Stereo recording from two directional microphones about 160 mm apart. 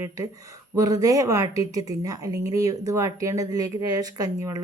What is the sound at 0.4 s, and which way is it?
Speech, 20° right (ahead or behind).